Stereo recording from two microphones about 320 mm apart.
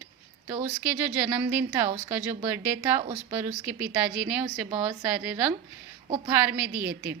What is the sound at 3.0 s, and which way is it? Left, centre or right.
Speech, right.